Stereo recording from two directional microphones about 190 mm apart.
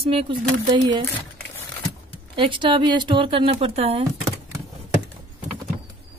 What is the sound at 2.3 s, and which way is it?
Speech, 25° right (ahead or behind).